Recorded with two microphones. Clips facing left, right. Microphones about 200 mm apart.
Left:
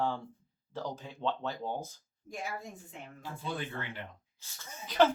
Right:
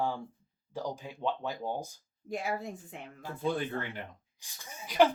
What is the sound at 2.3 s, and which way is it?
Speech, 65° right (ahead or behind).